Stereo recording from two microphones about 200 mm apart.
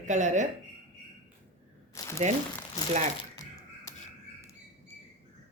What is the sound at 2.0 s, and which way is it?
Crumpling, 15° left (ahead or behind).